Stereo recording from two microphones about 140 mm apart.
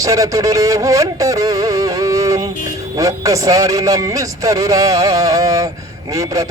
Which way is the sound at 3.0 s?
25° right (ahead or behind).